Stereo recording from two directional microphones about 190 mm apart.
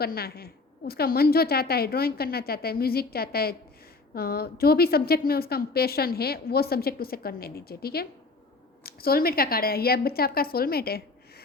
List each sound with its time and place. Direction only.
0.0 s a woman's voice: 55° left (ahead or behind)